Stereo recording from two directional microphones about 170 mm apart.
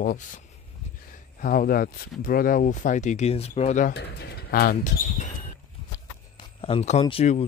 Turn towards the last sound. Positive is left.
turn(degrees=40)  # may be behind; listen again after turning